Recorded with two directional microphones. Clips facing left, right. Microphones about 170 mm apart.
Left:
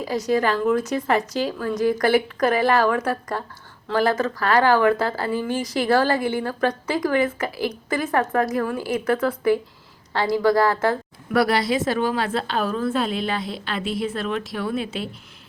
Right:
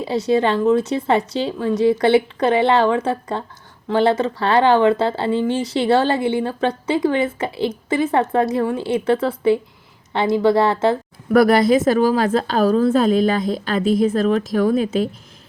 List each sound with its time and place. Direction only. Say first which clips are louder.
0.0 s speech: right 4 dB; 25° right (ahead or behind)
11.3 s a woman's voice: right 7 dB; 50° right (ahead or behind)